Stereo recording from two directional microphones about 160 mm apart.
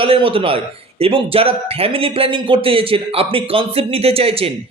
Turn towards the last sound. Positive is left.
turn(degrees=-35)  # may be behind; listen again after turning